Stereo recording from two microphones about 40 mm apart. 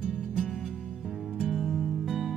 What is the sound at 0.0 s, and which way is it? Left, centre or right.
Music, centre.